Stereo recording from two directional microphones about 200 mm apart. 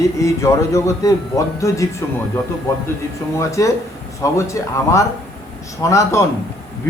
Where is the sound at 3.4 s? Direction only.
15° left (ahead or behind).